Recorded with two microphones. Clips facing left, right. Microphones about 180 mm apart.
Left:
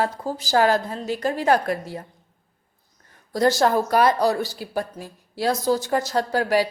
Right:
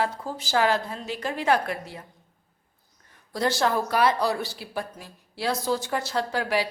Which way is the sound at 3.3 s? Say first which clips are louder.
Left 5 dB; 40° left (ahead or behind).